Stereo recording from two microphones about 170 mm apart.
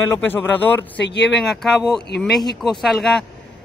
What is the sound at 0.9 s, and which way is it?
Speech, 90° left.